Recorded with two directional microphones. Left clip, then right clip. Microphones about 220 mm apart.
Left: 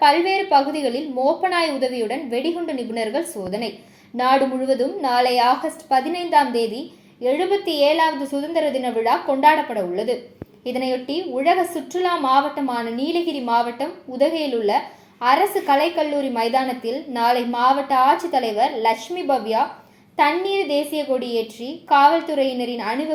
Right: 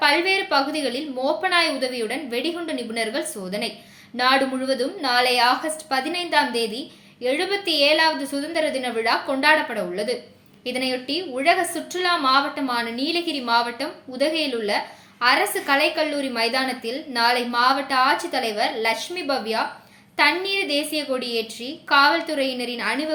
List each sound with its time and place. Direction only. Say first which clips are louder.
0.0 s a woman's voice: left 3 dB; 10° right (ahead or behind)
17.2 s a woman's voice: left 2 dB; 50° right (ahead or behind)
17.7 s a woman's voice: left 5 dB; 10° right (ahead or behind)